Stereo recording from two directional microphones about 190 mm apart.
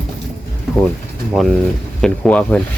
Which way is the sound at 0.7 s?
Centre (ahead or behind).